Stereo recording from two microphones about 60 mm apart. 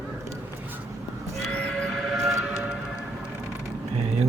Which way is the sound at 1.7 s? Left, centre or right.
Centre.